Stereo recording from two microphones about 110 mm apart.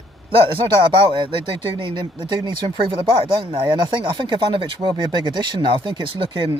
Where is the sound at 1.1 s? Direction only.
50° right (ahead or behind).